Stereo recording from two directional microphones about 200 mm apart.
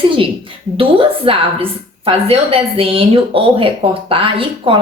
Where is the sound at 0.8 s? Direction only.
25° right (ahead or behind).